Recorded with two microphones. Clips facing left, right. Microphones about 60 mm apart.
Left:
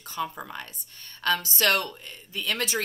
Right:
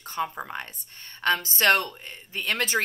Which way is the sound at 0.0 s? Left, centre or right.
Right.